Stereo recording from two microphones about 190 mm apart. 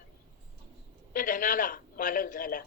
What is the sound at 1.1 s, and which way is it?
A man's voice, 45° left (ahead or behind).